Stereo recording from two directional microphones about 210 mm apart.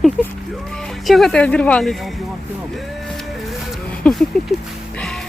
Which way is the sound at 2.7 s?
Centre (ahead or behind).